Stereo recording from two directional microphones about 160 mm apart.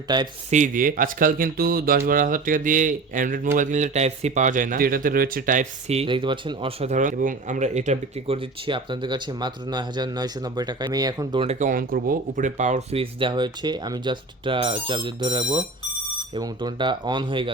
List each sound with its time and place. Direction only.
0.1 s speech: 25° right (ahead or behind)
0.5 s speech: 55° right (ahead or behind)
5.9 s speech: 35° right (ahead or behind)
11.4 s speech: 55° right (ahead or behind); by 17.5 s 30° right (ahead or behind)